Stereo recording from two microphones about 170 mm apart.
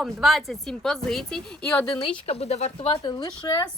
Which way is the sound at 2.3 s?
40° left (ahead or behind).